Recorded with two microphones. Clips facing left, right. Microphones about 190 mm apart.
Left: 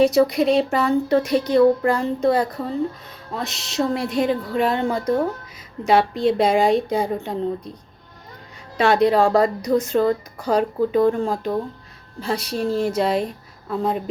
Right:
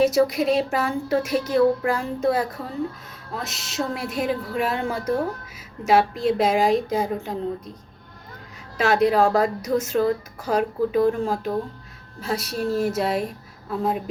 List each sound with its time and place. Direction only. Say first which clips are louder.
0.0 s a woman's voice: left 3 dB; 5° right (ahead or behind)
8.8 s a woman's voice: left 2 dB; centre (ahead or behind)